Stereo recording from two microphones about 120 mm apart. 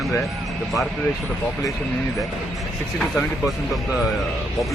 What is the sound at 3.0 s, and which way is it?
Speech, 5° left (ahead or behind).